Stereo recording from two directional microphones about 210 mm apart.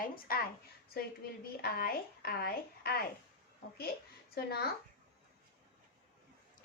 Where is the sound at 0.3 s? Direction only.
45° left (ahead or behind).